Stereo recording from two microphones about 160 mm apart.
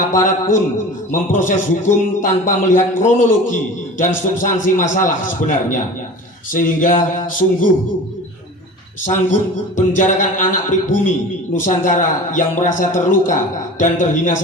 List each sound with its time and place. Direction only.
0.1 s a man's voice: 50° left (ahead or behind)
6.5 s a sound: 55° left (ahead or behind)
9.0 s a man's voice: 50° left (ahead or behind)